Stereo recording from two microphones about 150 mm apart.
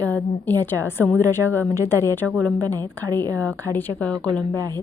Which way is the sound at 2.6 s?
25° right (ahead or behind).